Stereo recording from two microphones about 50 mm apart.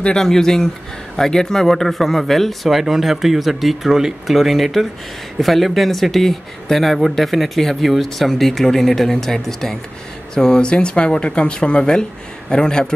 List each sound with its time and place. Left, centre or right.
0.0 s speech: centre